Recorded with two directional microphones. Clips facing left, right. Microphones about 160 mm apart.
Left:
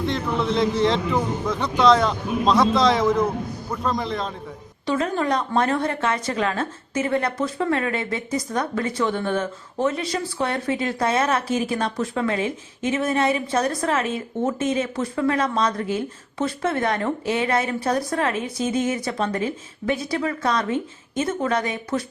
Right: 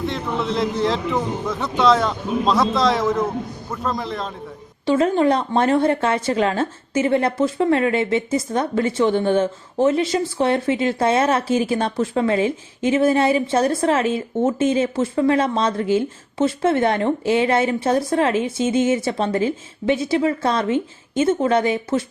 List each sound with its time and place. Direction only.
0.0 s a man's voice: centre (ahead or behind)
4.9 s a woman's voice: 30° right (ahead or behind)